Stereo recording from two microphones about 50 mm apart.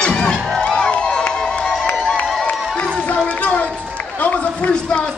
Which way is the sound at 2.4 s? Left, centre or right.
Left.